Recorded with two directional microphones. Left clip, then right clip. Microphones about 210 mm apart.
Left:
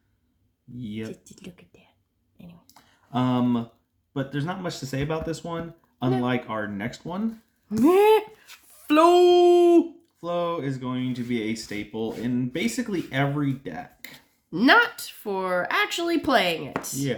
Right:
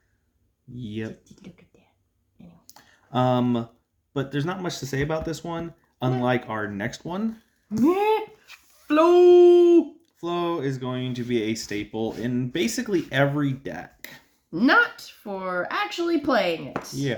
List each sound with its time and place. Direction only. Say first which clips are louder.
0.8 s speech: right 2 dB; 40° right (ahead or behind)
1.2 s speech: left 3 dB; 50° left (ahead or behind)
2.6 s a sound: right 2 dB; 40° right (ahead or behind)
4.1 s speech: right 2 dB; 40° right (ahead or behind)
7.9 s speech: left 4 dB; 50° left (ahead or behind)
10.2 s speech: even; 40° right (ahead or behind)
14.5 s speech: left 1 dB; 50° left (ahead or behind)